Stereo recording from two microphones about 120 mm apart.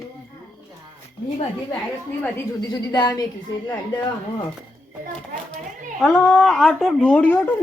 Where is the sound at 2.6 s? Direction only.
35° left (ahead or behind).